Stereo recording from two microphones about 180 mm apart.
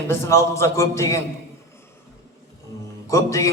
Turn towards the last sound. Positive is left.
turn(degrees=15)  # may be behind; listen again after turning